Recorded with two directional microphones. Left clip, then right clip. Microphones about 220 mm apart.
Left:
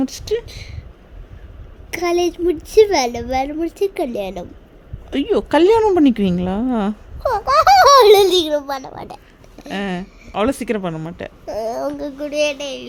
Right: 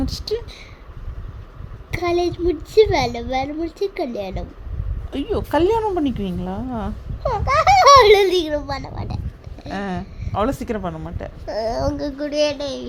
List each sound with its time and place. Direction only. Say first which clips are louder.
0.0 s speech: left 4 dB; 15° left (ahead or behind)
1.9 s a woman's voice: left 2 dB; 20° left (ahead or behind)
8.4 s a child's voice: left 4 dB; 10° right (ahead or behind)
9.6 s speech: left 2 dB; 25° left (ahead or behind)
11.4 s a woman's voice: even; 5° left (ahead or behind)